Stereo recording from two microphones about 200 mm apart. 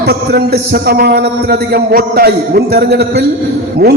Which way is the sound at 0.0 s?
50° right (ahead or behind).